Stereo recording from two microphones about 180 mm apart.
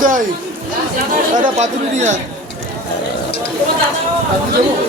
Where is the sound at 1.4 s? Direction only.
40° right (ahead or behind).